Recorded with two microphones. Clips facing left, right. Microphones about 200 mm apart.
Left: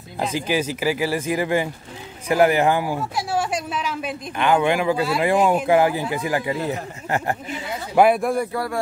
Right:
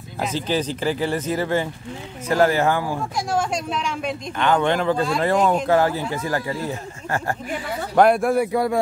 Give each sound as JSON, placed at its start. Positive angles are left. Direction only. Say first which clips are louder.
{"t": 0.3, "sound": "speech", "louder": "even", "side_deg": 10}
{"t": 3.2, "sound": "speech", "louder": "right 2 dB", "side_deg": 5}
{"t": 7.9, "sound": "speech", "louder": "right 1 dB", "side_deg": 5}